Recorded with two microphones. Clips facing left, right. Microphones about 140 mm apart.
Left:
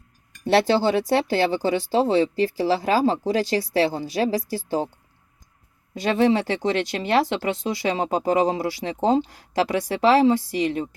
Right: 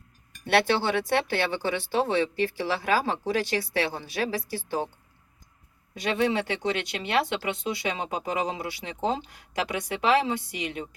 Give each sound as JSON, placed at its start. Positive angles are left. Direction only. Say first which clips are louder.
{"t": 0.4, "sound": "speech", "louder": "left 5 dB", "side_deg": 35}
{"t": 5.9, "sound": "speech", "louder": "left 6 dB", "side_deg": 30}